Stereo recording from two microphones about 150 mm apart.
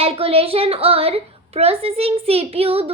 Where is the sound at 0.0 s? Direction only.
40° right (ahead or behind).